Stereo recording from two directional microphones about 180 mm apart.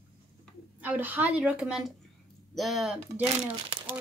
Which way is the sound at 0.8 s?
10° right (ahead or behind).